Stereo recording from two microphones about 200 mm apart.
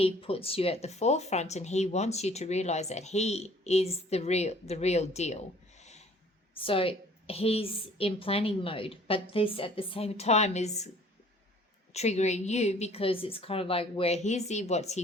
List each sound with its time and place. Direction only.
0.0 s speech: 30° left (ahead or behind)
6.5 s a woman's voice: 25° left (ahead or behind)
11.9 s speech: 35° left (ahead or behind)